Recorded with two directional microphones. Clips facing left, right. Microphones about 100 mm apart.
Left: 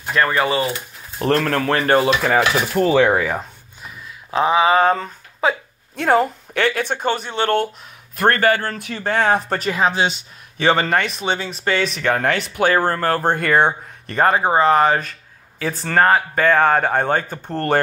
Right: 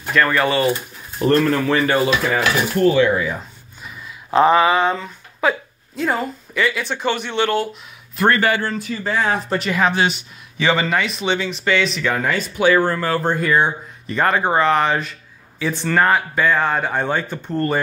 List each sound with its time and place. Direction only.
0.1 s speech: 25° left (ahead or behind)
1.2 s speech: 75° left (ahead or behind); by 2.4 s 55° left (ahead or behind)
3.0 s speech: 75° left (ahead or behind); by 3.4 s 60° left (ahead or behind)
4.3 s speech: centre (ahead or behind)
4.6 s speech: 45° left (ahead or behind)
5.4 s speech: 30° left (ahead or behind)
5.9 s speech: 65° left (ahead or behind)
9.7 s speech: 25° left (ahead or behind)
10.6 s speech: 50° left (ahead or behind)
14.6 s speech: 40° left (ahead or behind)
16.4 s speech: 55° left (ahead or behind)
17.5 s speech: 75° left (ahead or behind)